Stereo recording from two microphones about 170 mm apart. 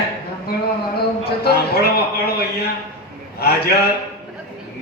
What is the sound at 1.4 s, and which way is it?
Speech, 65° left (ahead or behind).